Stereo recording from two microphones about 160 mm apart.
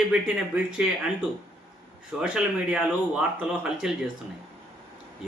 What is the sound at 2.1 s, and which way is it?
Speech, 5° right (ahead or behind).